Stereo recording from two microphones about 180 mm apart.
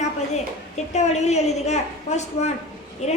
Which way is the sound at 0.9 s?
40° left (ahead or behind).